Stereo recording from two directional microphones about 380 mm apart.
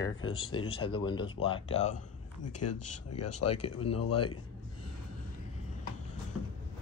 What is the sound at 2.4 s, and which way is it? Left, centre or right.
Speech, left.